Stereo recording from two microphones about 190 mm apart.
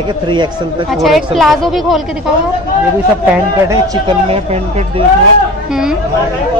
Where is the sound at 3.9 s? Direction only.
30° right (ahead or behind).